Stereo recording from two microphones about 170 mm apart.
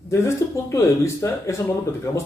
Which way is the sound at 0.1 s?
15° left (ahead or behind).